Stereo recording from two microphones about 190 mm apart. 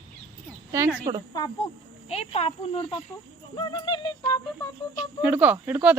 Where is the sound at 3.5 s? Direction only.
25° left (ahead or behind).